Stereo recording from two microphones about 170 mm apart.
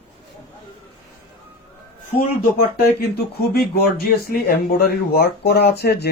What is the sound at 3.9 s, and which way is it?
Speech, 65° left (ahead or behind).